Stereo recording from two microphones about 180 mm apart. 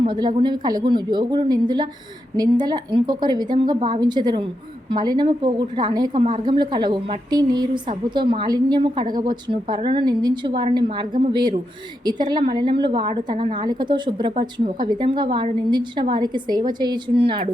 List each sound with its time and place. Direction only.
0.0 s a woman's voice: 25° right (ahead or behind)